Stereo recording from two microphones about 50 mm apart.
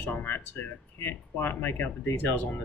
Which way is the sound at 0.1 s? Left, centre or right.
Left.